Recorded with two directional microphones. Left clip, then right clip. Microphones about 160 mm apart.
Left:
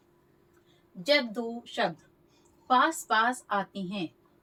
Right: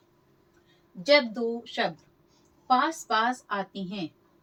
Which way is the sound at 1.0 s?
5° right (ahead or behind).